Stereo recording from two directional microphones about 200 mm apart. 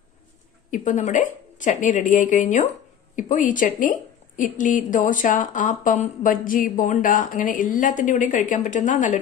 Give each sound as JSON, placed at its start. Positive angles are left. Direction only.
{"t": 0.7, "sound": "a woman's voice", "side_deg": 40}